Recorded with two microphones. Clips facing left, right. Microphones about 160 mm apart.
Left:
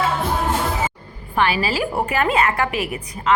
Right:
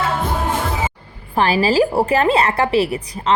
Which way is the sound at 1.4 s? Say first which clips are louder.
Right 5 dB; 35° right (ahead or behind).